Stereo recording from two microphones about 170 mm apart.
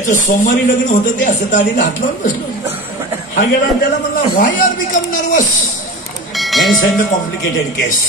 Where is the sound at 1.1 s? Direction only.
50° left (ahead or behind).